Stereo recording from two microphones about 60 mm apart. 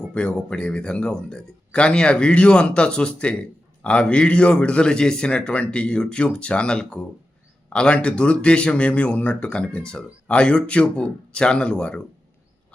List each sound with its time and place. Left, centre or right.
0.1 s speech: centre